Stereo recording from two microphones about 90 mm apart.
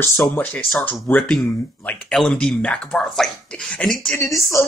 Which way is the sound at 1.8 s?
20° left (ahead or behind).